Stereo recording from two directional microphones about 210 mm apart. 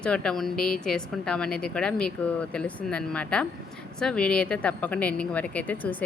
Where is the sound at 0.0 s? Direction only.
5° left (ahead or behind).